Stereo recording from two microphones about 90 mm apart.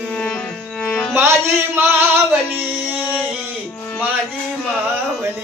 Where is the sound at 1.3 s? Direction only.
25° right (ahead or behind).